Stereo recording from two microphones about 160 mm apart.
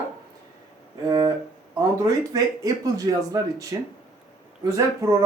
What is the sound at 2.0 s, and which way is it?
Speech, 20° right (ahead or behind).